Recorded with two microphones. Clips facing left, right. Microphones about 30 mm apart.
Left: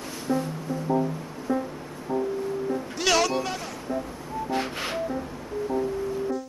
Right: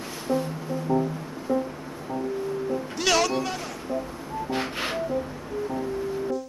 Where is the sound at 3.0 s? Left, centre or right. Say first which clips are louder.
Even; centre.